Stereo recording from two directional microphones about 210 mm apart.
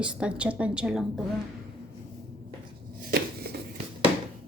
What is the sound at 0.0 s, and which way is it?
A woman's voice, 5° right (ahead or behind).